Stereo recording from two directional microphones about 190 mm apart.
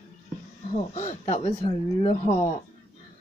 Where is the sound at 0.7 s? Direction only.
35° left (ahead or behind).